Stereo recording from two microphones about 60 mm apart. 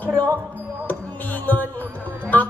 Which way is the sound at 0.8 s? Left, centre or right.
Left.